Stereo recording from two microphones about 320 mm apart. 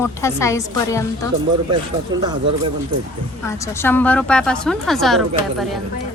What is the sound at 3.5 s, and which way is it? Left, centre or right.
A woman's voice, centre.